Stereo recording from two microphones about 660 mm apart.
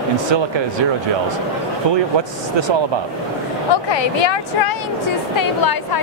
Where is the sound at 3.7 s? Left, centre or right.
Left.